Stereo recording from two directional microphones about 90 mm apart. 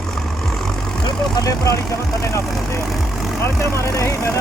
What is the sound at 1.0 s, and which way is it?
Speech, 45° left (ahead or behind).